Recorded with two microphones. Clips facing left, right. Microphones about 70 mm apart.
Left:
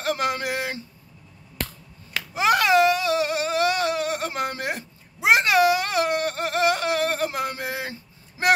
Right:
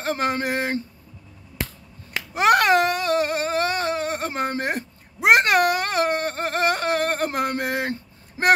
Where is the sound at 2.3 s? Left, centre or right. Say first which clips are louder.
Right 2 dB; right.